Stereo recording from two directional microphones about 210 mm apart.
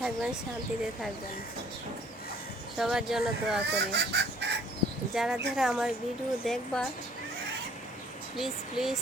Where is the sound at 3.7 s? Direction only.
55° right (ahead or behind).